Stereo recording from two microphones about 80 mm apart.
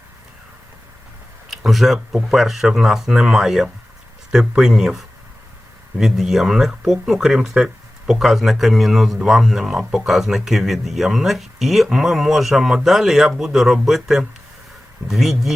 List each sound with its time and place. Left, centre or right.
1.5 s speech: centre